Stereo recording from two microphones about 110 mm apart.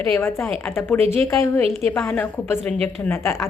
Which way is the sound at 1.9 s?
15° left (ahead or behind).